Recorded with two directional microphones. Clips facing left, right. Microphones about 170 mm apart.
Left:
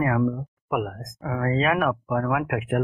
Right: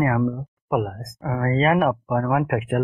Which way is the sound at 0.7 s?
35° right (ahead or behind).